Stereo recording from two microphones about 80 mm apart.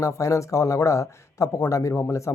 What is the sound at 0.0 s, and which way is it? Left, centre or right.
Speech, left.